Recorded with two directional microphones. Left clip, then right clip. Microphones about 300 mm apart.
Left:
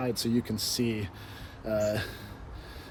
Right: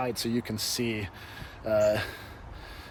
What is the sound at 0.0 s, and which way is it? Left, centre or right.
Speech, right.